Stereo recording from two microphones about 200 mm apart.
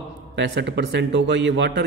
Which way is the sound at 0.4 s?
60° right (ahead or behind).